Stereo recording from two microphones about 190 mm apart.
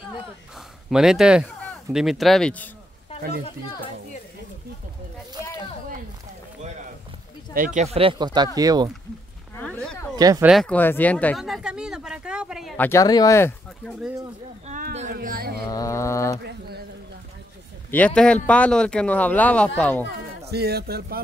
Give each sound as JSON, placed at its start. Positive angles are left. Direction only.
{"t": 0.8, "sound": "speech", "side_deg": 0}
{"t": 7.5, "sound": "speech", "side_deg": -40}
{"t": 9.6, "sound": "a sound", "side_deg": 5}
{"t": 10.1, "sound": "speech", "side_deg": -20}
{"t": 10.4, "sound": "speech", "side_deg": 0}
{"t": 12.7, "sound": "speech", "side_deg": 15}
{"t": 14.7, "sound": "a sound", "side_deg": -35}
{"t": 15.1, "sound": "speech", "side_deg": -50}
{"t": 15.7, "sound": "speech", "side_deg": 15}
{"t": 16.4, "sound": "a sound", "side_deg": -55}
{"t": 17.9, "sound": "speech", "side_deg": 5}
{"t": 20.4, "sound": "speech", "side_deg": -55}